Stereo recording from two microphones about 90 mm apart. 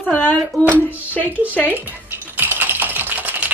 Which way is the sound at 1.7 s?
20° right (ahead or behind).